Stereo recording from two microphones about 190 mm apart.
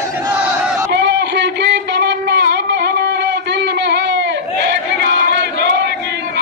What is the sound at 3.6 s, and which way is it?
Crowd, 65° right (ahead or behind).